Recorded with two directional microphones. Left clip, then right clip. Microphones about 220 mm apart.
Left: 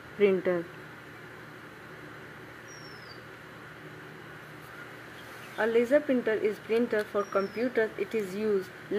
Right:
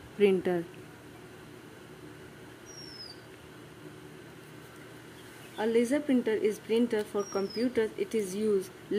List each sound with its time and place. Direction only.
0.2 s speech: 20° right (ahead or behind)
5.6 s speech: 20° right (ahead or behind)